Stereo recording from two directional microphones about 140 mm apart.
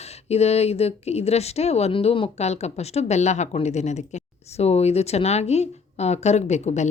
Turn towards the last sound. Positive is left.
turn(degrees=55)  # may be behind; listen again after turning